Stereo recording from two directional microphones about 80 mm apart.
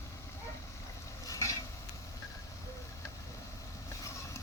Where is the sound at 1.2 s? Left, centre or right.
Left.